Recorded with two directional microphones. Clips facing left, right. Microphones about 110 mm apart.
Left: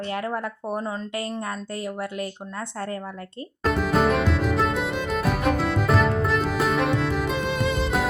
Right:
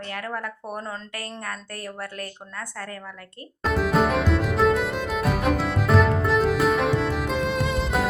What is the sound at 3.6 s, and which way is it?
Music, centre (ahead or behind).